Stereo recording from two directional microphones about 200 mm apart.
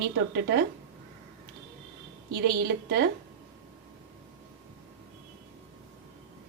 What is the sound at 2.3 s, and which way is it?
Speech, 55° right (ahead or behind).